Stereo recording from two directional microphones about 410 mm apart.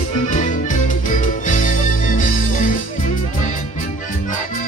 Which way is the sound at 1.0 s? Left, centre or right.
Centre.